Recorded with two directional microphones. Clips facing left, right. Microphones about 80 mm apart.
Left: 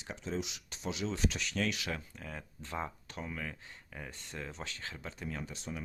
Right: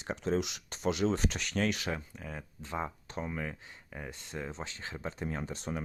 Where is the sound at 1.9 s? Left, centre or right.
Centre; by 5.6 s right.